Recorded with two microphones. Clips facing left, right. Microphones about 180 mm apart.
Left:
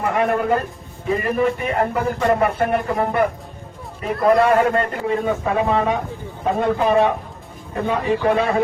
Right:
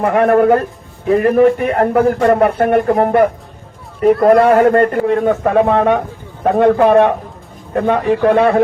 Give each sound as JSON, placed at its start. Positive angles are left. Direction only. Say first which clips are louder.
{"t": 0.0, "sound": "a man's voice", "louder": "right 8 dB", "side_deg": -55}